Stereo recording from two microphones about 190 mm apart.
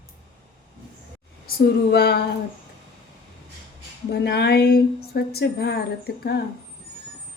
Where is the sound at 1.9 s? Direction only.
60° left (ahead or behind).